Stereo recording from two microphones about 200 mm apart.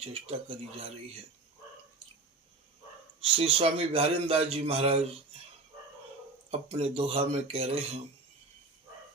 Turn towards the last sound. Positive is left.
turn(degrees=-30)  # may be behind; listen again after turning